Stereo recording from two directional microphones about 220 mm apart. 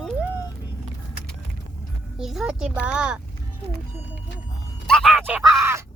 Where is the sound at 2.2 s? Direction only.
Centre (ahead or behind).